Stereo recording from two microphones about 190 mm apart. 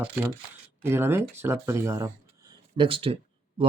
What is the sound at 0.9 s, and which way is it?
Speech, 10° right (ahead or behind).